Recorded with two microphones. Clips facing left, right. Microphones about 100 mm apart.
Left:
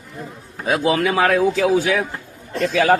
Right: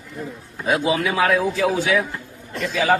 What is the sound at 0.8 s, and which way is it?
Speech, 60° left (ahead or behind).